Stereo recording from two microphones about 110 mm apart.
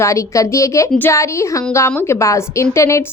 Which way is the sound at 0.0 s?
25° left (ahead or behind).